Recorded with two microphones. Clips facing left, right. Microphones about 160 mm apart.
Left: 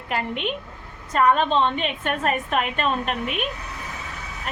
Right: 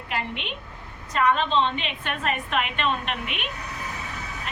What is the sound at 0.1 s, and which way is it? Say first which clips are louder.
A woman's voice: left 5 dB; 45° left (ahead or behind).